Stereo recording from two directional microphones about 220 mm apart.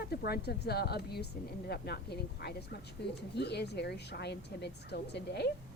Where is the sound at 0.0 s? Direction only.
45° left (ahead or behind).